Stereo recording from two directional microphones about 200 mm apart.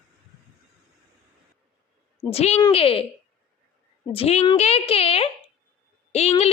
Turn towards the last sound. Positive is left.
turn(degrees=30)  # may be behind; listen again after turning